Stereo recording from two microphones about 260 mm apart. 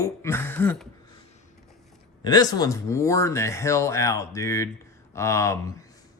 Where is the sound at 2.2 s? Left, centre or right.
Centre.